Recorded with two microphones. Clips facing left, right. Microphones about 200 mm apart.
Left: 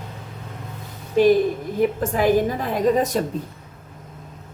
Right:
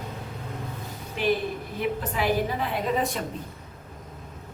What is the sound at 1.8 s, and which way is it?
A woman's voice, 45° left (ahead or behind).